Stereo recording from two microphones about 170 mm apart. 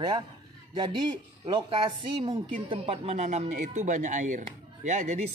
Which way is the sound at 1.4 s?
30° right (ahead or behind).